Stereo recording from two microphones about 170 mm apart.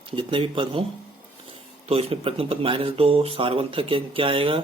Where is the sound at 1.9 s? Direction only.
35° right (ahead or behind).